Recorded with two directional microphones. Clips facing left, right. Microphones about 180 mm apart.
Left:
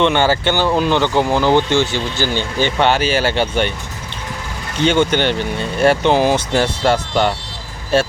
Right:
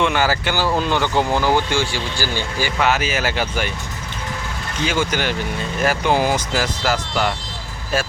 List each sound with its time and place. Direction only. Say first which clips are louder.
0.0 s speech: left 4 dB; 25° left (ahead or behind)
4.9 s speech: left 7 dB; 30° left (ahead or behind)